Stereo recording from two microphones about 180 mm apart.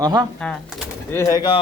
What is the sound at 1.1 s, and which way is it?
Speech, 15° left (ahead or behind).